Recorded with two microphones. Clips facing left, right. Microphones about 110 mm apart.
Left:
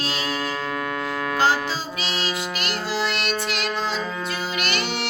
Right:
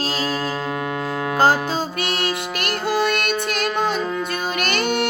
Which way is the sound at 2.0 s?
55° right (ahead or behind).